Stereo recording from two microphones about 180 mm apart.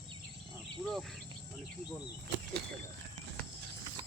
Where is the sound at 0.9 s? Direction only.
Centre (ahead or behind).